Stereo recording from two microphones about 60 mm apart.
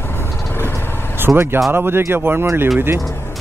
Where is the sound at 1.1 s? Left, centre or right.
Right.